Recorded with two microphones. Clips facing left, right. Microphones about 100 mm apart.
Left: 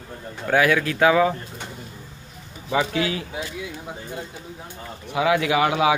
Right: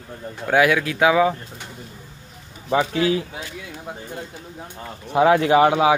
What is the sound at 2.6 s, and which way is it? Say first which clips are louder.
Speech: right 3 dB; 40° right (ahead or behind).